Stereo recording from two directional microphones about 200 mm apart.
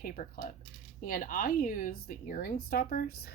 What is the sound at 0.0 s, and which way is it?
Speech, 45° left (ahead or behind).